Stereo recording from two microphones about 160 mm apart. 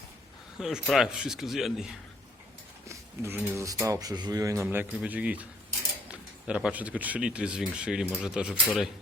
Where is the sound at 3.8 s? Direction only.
25° right (ahead or behind).